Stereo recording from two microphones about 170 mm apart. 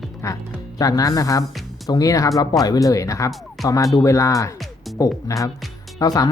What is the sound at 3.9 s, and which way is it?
Speech, 20° left (ahead or behind).